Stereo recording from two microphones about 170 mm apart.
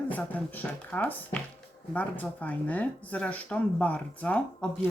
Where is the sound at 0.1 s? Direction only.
10° left (ahead or behind).